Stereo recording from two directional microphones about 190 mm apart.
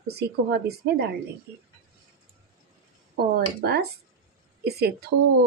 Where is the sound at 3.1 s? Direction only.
55° right (ahead or behind).